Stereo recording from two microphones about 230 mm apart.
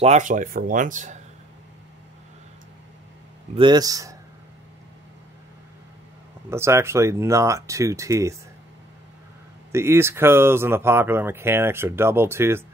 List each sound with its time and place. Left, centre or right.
0.0 s speech: right
3.5 s speech: centre
6.5 s speech: centre
9.7 s speech: centre